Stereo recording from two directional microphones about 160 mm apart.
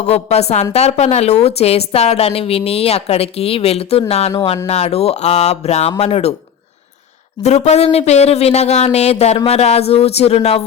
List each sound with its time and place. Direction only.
0.0 s a woman's voice: 40° left (ahead or behind)
7.4 s a woman's voice: 45° left (ahead or behind)